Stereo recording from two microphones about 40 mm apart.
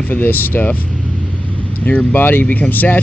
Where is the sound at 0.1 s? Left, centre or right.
Left.